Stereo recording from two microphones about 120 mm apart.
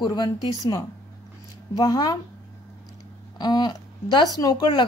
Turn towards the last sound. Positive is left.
turn(degrees=35)  # may be behind; listen again after turning